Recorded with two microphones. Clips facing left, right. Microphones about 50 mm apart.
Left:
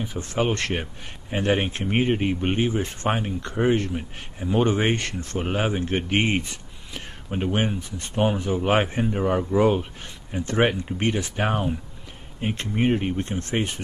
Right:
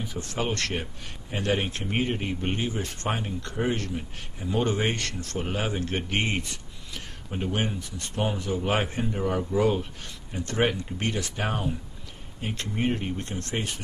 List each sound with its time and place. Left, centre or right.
0.0 s speech: left
6.9 s a sound: left
8.2 s speech: left